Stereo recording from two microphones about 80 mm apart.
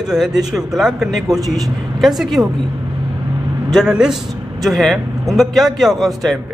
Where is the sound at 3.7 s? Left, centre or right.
Centre.